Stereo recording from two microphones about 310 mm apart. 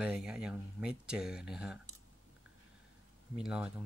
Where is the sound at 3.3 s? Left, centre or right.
Centre.